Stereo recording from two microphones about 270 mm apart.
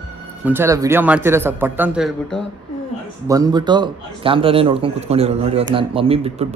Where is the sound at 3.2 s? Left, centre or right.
Centre.